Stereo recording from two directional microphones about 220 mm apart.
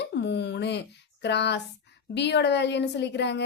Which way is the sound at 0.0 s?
50° left (ahead or behind).